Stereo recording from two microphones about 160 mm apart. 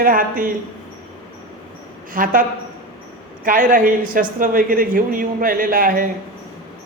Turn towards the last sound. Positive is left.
turn(degrees=-65)  # may be behind; listen again after turning